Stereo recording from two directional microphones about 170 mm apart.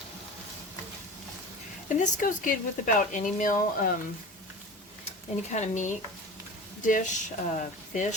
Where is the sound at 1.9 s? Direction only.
50° left (ahead or behind).